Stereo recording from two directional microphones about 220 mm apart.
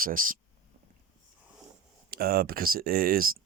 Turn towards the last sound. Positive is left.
turn(degrees=-40)  # may be behind; listen again after turning